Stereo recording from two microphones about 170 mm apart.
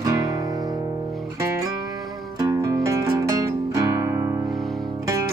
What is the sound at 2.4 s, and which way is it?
Music, 20° right (ahead or behind).